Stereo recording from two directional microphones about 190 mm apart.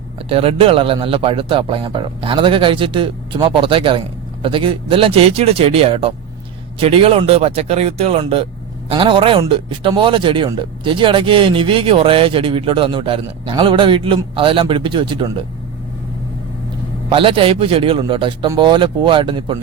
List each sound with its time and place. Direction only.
0.2 s speech: 30° right (ahead or behind)
17.1 s speech: 25° right (ahead or behind)